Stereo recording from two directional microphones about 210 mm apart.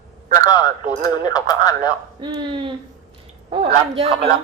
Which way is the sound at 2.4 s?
20° right (ahead or behind).